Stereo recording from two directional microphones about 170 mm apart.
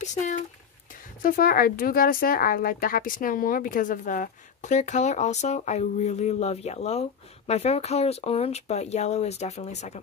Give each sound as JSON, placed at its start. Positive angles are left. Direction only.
{"t": 0.0, "sound": "speech", "side_deg": 45}
{"t": 1.2, "sound": "speech", "side_deg": 55}